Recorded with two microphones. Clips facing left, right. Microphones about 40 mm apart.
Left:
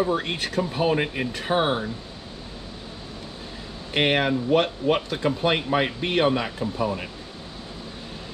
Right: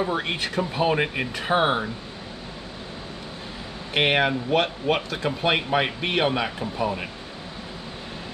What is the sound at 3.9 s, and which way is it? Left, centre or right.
Speech, centre.